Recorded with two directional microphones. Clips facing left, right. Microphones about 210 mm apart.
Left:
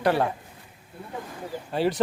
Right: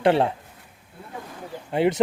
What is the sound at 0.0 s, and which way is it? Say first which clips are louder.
Speech: right 4 dB; 25° right (ahead or behind).